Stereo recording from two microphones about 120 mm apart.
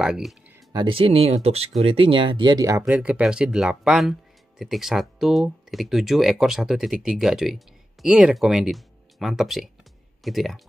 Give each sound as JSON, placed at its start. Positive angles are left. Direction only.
{"t": 0.0, "sound": "speech", "side_deg": -5}
{"t": 0.7, "sound": "speech", "side_deg": -50}
{"t": 2.9, "sound": "speech", "side_deg": -10}